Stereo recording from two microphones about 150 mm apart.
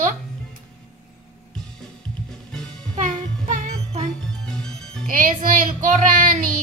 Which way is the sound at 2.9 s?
55° right (ahead or behind).